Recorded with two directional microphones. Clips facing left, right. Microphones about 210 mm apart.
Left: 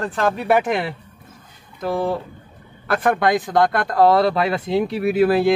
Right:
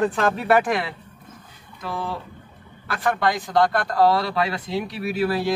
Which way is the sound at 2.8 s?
50° left (ahead or behind).